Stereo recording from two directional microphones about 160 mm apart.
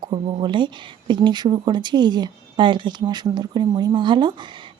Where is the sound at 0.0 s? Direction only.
30° right (ahead or behind).